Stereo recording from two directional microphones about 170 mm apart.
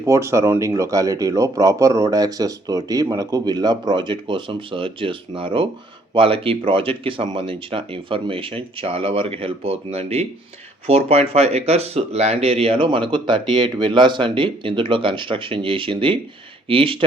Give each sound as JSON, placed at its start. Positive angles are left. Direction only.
{"t": 0.0, "sound": "speech", "side_deg": -15}